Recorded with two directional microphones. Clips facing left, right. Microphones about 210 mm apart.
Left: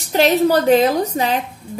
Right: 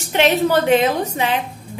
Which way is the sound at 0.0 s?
35° left (ahead or behind).